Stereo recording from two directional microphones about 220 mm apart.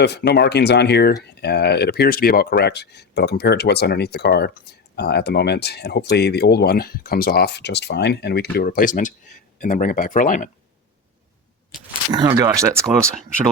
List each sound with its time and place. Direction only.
0.0 s speech: 45° left (ahead or behind)
12.1 s speech: 15° right (ahead or behind)